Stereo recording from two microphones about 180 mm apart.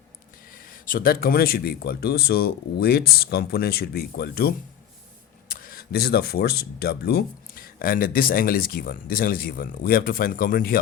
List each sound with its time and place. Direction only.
0.5 s speech: 50° left (ahead or behind)